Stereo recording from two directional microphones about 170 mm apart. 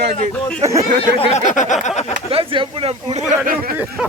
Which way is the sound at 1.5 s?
45° left (ahead or behind).